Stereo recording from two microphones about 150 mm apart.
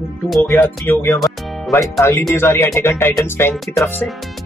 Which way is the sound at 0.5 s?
15° left (ahead or behind).